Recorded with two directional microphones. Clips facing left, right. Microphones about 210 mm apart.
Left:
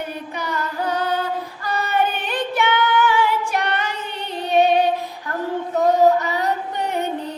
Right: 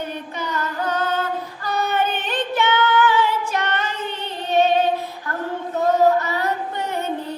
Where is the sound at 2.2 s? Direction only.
10° left (ahead or behind).